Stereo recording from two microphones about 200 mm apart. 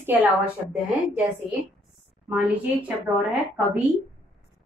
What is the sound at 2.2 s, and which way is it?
A woman's voice, 5° right (ahead or behind).